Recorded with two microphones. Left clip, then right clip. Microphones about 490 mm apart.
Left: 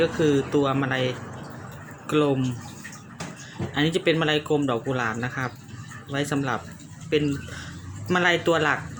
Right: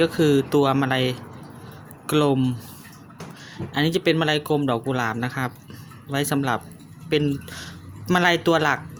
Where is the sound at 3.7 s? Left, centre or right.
Right.